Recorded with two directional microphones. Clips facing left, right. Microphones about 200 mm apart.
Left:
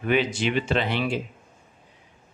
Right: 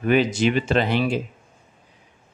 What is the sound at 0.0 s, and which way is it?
Speech, 40° right (ahead or behind).